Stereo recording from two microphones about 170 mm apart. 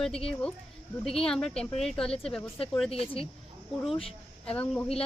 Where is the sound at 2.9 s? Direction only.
35° left (ahead or behind).